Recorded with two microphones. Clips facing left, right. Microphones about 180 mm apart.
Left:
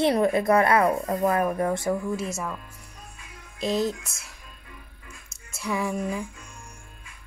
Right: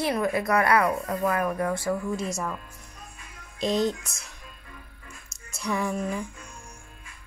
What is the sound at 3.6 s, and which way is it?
Speech, 5° left (ahead or behind).